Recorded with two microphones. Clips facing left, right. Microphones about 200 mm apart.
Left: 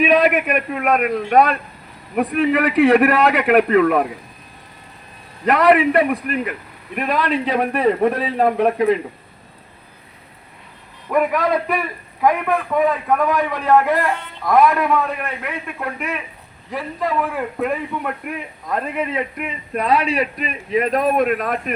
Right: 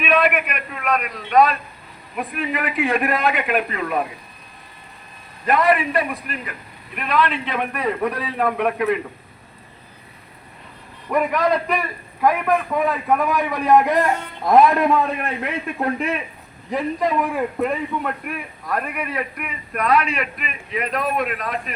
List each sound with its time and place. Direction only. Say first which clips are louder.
0.0 s a man's voice: left 4 dB; 40° left (ahead or behind); by 1.5 s 55° left (ahead or behind)
2.1 s a man's voice: left 8 dB; 70° left (ahead or behind)
5.5 s a man's voice: left 4 dB; 70° left (ahead or behind)
6.9 s a man's voice: left 2 dB; 45° left (ahead or behind)
11.1 s a man's voice: left 1 dB; centre (ahead or behind)
13.1 s a man's voice: left 2 dB; 10° right (ahead or behind)
18.0 s a man's voice: left 1 dB; 20° left (ahead or behind); by 21.6 s 50° left (ahead or behind)